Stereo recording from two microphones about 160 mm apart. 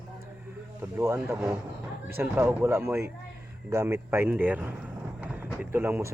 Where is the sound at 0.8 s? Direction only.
15° right (ahead or behind).